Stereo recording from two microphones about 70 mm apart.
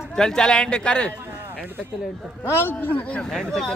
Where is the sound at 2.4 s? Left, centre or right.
Left.